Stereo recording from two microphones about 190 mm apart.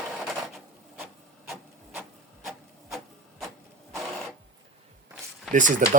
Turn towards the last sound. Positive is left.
turn(degrees=-45)  # may be behind; listen again after turning